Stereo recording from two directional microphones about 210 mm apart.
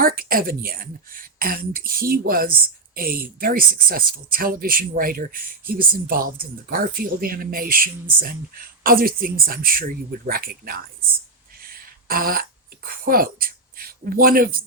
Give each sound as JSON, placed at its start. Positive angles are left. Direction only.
{"t": 0.0, "sound": "speech", "side_deg": -45}
{"t": 12.0, "sound": "speech", "side_deg": -45}